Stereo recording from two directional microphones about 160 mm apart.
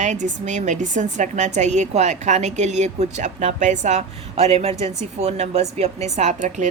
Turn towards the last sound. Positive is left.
turn(degrees=-50)  # may be behind; listen again after turning